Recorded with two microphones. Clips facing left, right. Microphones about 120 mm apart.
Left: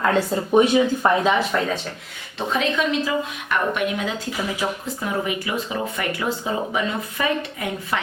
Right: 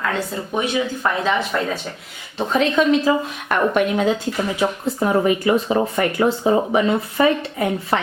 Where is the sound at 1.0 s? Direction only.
25° left (ahead or behind).